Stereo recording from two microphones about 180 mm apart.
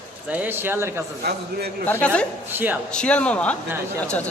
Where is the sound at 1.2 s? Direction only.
60° right (ahead or behind).